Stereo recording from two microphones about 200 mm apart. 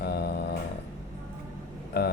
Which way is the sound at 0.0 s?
50° left (ahead or behind).